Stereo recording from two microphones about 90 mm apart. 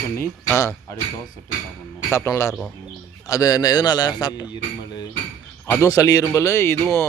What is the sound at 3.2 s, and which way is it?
A man's voice, 40° left (ahead or behind).